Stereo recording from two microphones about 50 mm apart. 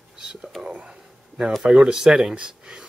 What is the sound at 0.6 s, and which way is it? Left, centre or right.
Speech, centre.